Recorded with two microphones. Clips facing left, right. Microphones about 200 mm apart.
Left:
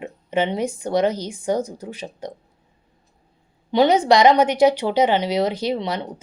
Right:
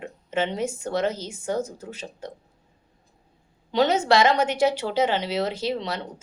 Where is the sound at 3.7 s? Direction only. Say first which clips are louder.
Left 5 dB; 15° left (ahead or behind).